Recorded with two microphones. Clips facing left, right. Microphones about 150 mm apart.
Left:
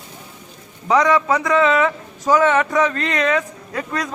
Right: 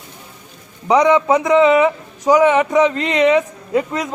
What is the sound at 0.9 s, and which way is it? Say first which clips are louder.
A man's voice: right 3 dB; 20° right (ahead or behind).